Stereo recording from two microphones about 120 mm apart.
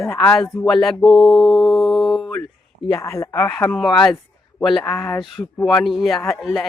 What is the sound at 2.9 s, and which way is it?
Speech, 25° left (ahead or behind).